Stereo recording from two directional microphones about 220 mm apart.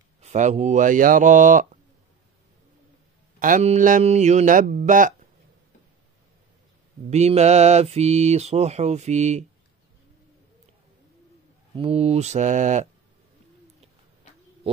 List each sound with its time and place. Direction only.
0.2 s mantra: 30° right (ahead or behind)
3.3 s mantra: 35° right (ahead or behind)
7.1 s mantra: 30° right (ahead or behind)
11.7 s mantra: 25° right (ahead or behind)